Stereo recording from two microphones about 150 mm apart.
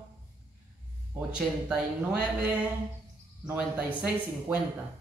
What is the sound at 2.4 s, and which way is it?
Speech, 10° right (ahead or behind).